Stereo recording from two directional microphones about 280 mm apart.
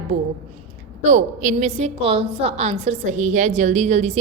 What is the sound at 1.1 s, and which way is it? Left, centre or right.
A woman's voice, right.